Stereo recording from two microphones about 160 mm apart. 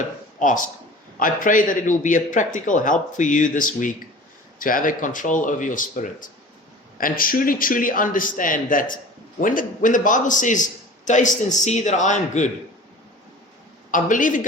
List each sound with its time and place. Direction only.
0.3 s a man's voice: 55° left (ahead or behind)
13.9 s a man's voice: 55° left (ahead or behind)